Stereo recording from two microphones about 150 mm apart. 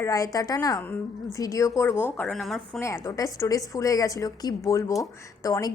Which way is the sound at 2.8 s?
20° left (ahead or behind).